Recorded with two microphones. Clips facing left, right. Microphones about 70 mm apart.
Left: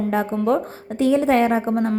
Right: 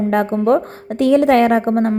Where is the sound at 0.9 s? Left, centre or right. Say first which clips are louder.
Right 5 dB; right.